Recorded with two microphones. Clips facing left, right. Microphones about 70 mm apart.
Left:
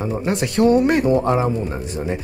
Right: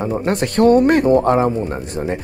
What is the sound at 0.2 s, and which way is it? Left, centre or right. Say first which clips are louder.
Speech: right 2 dB; right.